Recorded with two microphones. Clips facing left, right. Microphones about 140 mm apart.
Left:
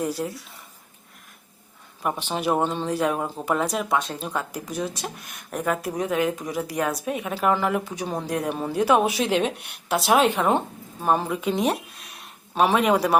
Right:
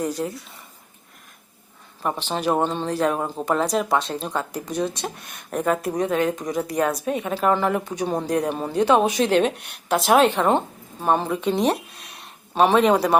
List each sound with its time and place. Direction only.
0.0 s speech: 5° left (ahead or behind)
2.2 s speech: 10° left (ahead or behind)